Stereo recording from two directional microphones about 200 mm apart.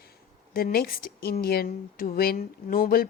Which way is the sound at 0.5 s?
50° left (ahead or behind).